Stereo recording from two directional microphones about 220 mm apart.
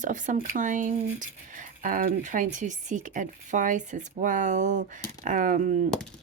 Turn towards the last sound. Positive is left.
turn(degrees=-35)  # may be behind; listen again after turning